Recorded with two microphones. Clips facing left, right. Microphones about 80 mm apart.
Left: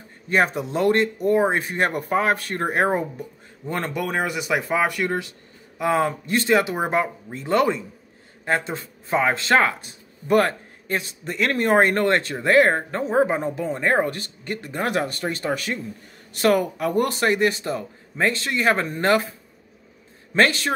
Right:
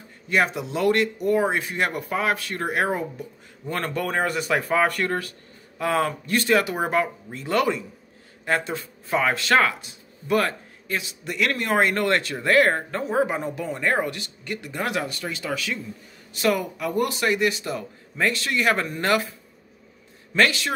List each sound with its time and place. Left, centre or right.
0.5 s speech: left
3.6 s speech: centre
9.8 s a man's voice: left
20.3 s speech: left